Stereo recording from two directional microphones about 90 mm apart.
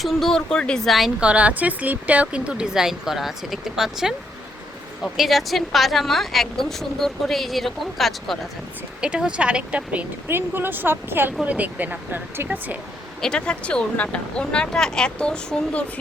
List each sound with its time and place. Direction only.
0.0 s a woman's voice: 5° left (ahead or behind)
1.2 s speech: 15° right (ahead or behind)
5.1 s a woman's voice: centre (ahead or behind)
9.0 s speech: 10° right (ahead or behind)
13.2 s speech: 10° left (ahead or behind)